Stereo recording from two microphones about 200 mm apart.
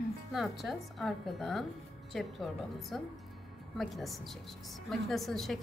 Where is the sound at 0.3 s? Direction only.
Centre (ahead or behind).